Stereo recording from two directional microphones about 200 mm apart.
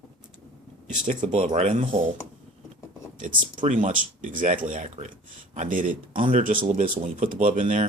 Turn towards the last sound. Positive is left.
turn(degrees=-40)  # may be behind; listen again after turning